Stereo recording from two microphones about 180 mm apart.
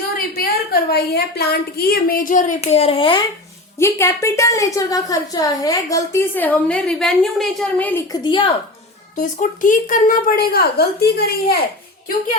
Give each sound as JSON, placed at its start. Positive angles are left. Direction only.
{"t": 0.3, "sound": "a woman's voice", "side_deg": 55}
{"t": 3.8, "sound": "a woman's voice", "side_deg": 15}
{"t": 8.1, "sound": "a woman's voice", "side_deg": 25}
{"t": 9.1, "sound": "a woman's voice", "side_deg": 45}